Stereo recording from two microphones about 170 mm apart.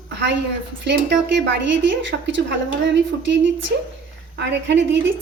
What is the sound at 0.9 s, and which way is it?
A woman's voice, 90° right.